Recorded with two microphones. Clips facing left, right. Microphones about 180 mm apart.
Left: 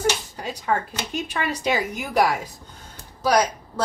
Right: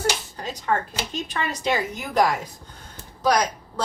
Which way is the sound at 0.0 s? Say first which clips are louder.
Left 2 dB; 10° left (ahead or behind).